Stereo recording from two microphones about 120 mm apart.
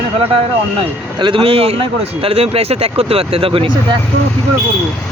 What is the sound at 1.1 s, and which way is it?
Speech, 45° right (ahead or behind).